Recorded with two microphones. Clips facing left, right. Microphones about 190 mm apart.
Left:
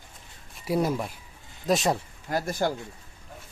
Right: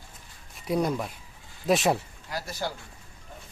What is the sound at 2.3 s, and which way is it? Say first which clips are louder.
Speech: left 7 dB; 50° left (ahead or behind).